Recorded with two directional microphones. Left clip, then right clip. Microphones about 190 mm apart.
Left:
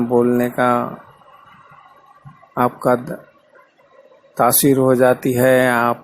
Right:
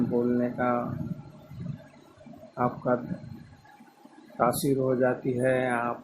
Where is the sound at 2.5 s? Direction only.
35° left (ahead or behind).